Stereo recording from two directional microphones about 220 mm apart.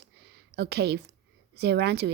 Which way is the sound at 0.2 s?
50° right (ahead or behind).